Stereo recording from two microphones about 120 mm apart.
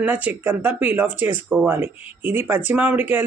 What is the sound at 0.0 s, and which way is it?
Speech, 15° right (ahead or behind).